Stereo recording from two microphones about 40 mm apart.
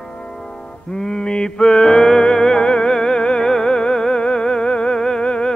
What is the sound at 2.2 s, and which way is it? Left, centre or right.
Music, centre.